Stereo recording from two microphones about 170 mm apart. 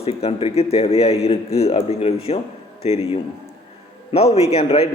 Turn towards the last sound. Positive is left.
turn(degrees=35)  # may be behind; listen again after turning